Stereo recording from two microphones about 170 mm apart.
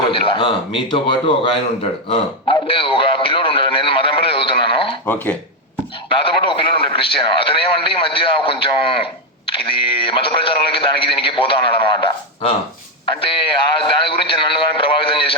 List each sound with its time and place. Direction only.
0.1 s a man's voice: 30° left (ahead or behind)
5.0 s speech: 10° left (ahead or behind)
6.1 s a man's voice: 30° left (ahead or behind)